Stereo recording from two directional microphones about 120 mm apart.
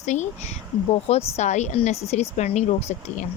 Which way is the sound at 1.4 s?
75° left (ahead or behind).